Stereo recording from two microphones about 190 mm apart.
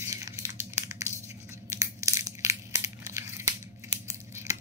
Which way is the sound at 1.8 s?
15° right (ahead or behind).